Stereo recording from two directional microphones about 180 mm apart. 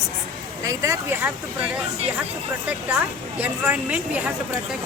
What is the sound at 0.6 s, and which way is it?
A woman's voice, 15° right (ahead or behind).